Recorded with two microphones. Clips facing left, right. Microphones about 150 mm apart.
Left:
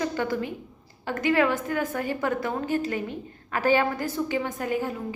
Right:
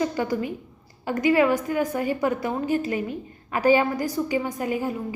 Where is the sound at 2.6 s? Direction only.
45° left (ahead or behind).